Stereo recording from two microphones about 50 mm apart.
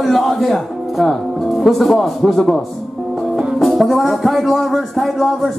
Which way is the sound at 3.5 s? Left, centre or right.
Centre.